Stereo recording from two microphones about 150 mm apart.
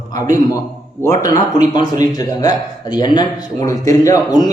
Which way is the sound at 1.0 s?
20° left (ahead or behind).